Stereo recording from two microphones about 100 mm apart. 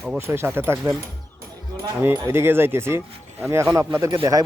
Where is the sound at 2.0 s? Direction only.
25° right (ahead or behind).